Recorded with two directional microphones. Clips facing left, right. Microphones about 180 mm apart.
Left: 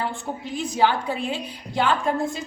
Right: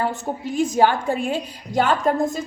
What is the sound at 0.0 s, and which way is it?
A woman's voice, 45° right (ahead or behind).